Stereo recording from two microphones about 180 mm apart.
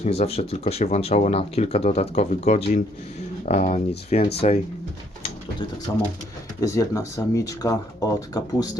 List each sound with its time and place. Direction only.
0.0 s speech: 35° left (ahead or behind)
6.6 s speech: 20° left (ahead or behind)